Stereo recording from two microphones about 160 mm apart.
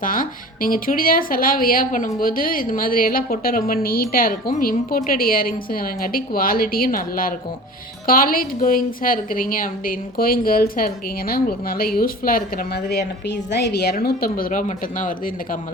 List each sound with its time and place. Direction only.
0.0 s speech: 60° left (ahead or behind)